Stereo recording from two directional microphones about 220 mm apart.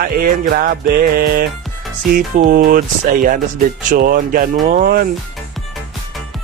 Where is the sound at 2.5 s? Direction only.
40° right (ahead or behind).